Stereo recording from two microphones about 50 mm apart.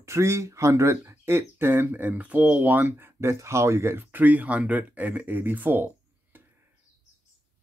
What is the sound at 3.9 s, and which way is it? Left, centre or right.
Speech, right.